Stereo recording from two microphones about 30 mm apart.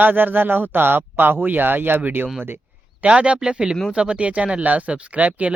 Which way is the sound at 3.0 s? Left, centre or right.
Right.